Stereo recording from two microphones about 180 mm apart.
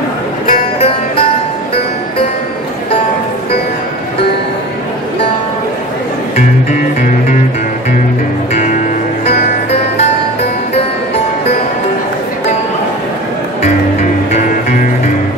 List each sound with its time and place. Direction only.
0.5 s music: 35° left (ahead or behind)